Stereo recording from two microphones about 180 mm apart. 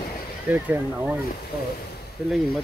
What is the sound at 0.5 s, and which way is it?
Speech, 10° right (ahead or behind).